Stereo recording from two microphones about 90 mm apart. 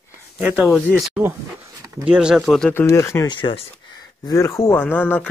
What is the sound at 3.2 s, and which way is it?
Speech, 65° left (ahead or behind).